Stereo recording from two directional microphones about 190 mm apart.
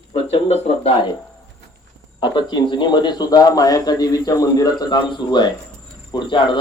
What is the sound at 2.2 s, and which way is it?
A man's voice, 25° left (ahead or behind).